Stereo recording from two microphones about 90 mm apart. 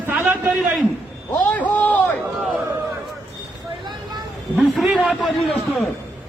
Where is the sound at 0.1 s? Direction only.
25° right (ahead or behind).